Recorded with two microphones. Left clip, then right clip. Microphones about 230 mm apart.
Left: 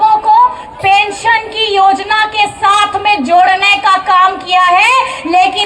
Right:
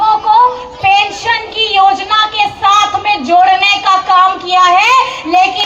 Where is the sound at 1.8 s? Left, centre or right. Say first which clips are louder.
Even; left.